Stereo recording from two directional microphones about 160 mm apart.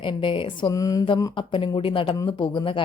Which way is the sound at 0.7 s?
20° left (ahead or behind).